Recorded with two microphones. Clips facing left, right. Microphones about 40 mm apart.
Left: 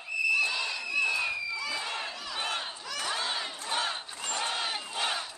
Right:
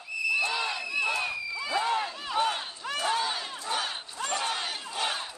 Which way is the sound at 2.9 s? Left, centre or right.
Right.